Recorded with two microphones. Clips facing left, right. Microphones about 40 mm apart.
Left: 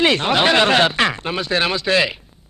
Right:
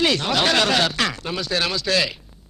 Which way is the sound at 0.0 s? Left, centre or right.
Left.